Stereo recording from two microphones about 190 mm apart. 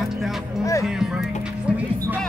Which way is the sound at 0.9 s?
Centre (ahead or behind).